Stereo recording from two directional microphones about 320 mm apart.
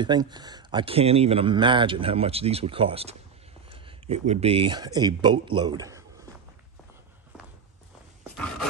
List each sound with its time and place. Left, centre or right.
0.0 s speech: centre